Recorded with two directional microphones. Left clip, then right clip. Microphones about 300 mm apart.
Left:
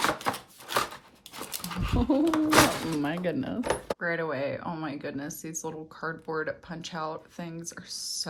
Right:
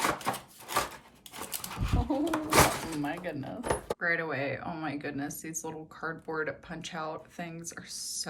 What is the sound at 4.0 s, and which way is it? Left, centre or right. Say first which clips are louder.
A woman's voice: left 1 dB; centre.